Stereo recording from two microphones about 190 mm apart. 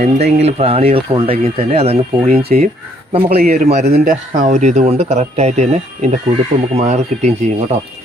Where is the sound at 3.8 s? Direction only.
50° right (ahead or behind); by 7.8 s 35° right (ahead or behind).